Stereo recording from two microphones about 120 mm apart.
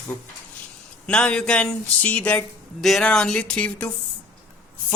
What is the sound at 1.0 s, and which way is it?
Speech, 10° left (ahead or behind).